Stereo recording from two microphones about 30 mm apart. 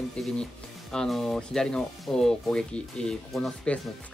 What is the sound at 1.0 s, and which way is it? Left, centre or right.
Speech, centre.